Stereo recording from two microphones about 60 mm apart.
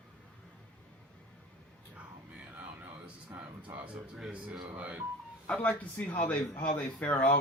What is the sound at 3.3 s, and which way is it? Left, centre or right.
Music, right.